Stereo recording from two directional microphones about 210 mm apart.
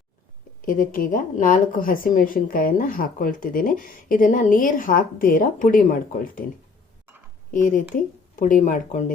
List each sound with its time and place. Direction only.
0.6 s speech: 40° left (ahead or behind)
7.5 s speech: 40° left (ahead or behind)